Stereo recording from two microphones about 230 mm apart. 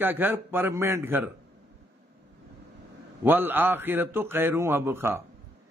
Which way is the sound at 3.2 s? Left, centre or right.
Centre.